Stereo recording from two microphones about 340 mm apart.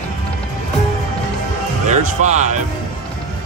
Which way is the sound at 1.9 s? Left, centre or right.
Right.